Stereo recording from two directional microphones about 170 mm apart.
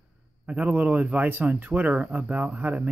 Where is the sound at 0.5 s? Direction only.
10° right (ahead or behind).